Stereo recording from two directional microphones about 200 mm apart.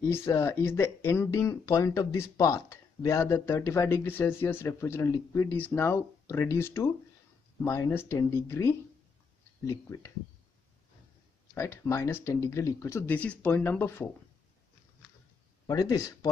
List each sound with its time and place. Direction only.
0.1 s speech: 15° left (ahead or behind)
11.5 s speech: 15° left (ahead or behind)
15.6 s speech: 15° left (ahead or behind)